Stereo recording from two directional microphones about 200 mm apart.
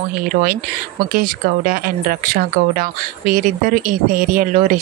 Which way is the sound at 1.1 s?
45° right (ahead or behind).